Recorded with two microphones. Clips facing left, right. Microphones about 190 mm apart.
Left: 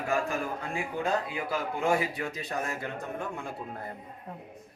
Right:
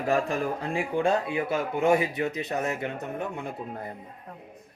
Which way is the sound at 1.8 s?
20° right (ahead or behind).